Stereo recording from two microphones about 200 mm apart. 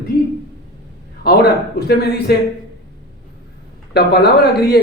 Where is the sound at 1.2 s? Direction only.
50° left (ahead or behind).